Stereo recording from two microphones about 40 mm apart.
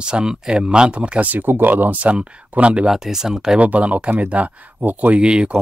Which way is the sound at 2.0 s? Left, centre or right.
Right.